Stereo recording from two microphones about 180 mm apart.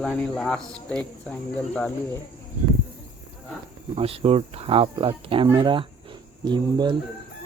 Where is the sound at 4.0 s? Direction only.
30° right (ahead or behind).